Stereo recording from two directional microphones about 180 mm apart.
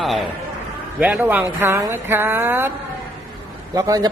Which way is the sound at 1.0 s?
5° right (ahead or behind).